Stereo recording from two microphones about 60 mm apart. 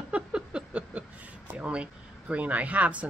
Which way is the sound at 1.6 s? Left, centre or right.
Centre.